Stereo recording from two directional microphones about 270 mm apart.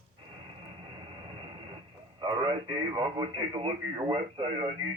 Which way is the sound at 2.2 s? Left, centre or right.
Centre.